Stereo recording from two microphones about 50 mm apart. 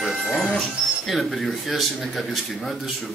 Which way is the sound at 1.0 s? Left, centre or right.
Centre.